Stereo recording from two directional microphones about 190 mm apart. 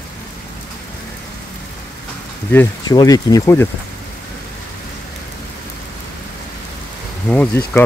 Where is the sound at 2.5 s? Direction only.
15° left (ahead or behind).